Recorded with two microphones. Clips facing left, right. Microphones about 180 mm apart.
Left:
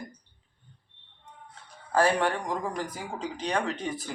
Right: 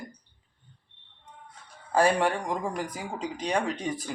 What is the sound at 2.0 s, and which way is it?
Speech, 10° right (ahead or behind).